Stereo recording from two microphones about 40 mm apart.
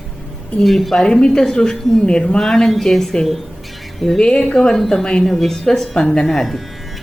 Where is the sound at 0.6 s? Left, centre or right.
Centre.